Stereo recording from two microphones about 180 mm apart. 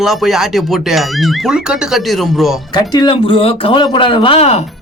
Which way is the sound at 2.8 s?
25° left (ahead or behind).